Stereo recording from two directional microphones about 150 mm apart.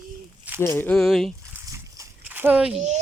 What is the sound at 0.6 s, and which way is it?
Speech, 15° left (ahead or behind).